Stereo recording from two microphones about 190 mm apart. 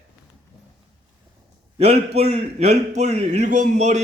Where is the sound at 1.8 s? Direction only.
35° right (ahead or behind).